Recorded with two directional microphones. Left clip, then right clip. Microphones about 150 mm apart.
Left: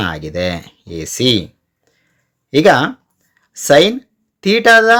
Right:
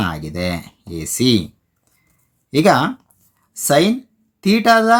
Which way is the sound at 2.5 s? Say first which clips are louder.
Left 4 dB; 20° left (ahead or behind).